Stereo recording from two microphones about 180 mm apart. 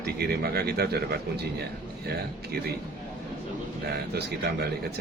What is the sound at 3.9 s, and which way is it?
Speech, 60° right (ahead or behind).